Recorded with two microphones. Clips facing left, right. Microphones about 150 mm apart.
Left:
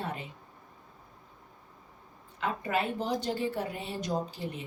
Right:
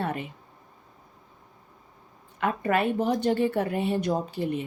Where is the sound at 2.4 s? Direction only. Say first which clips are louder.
Right 6 dB; 60° right (ahead or behind).